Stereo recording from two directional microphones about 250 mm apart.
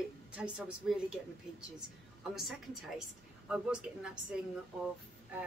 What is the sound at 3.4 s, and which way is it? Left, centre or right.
Speech, centre.